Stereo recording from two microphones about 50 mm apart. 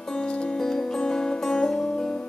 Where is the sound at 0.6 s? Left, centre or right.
Centre.